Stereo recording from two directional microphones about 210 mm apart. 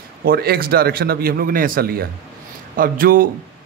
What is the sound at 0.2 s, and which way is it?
A man's voice, 45° right (ahead or behind).